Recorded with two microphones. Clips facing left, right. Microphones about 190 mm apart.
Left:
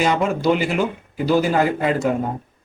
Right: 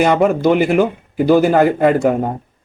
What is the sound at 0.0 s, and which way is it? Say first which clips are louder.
Speech: right 6 dB; 55° right (ahead or behind).